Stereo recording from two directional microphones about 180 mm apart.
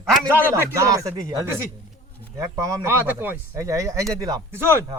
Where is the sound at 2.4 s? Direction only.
15° right (ahead or behind).